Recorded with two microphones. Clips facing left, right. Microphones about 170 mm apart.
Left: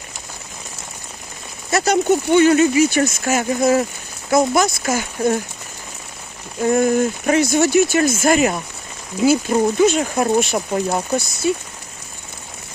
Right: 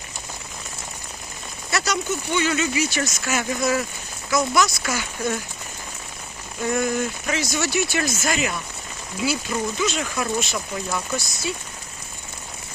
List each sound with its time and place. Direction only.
1.7 s speech: 50° left (ahead or behind)
6.7 s speech: 45° left (ahead or behind)
10.9 s speech: 45° left (ahead or behind)